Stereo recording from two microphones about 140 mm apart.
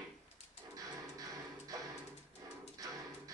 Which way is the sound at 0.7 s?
25° right (ahead or behind).